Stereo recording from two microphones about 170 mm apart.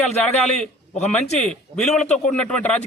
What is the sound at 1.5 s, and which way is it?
A man's voice, 5° left (ahead or behind).